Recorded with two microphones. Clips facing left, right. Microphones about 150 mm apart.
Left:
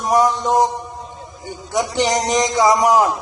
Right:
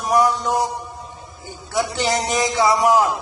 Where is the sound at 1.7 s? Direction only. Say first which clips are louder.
Left 3 dB; 20° left (ahead or behind).